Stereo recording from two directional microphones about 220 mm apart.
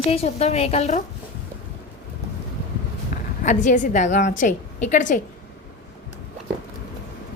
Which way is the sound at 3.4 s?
35° left (ahead or behind).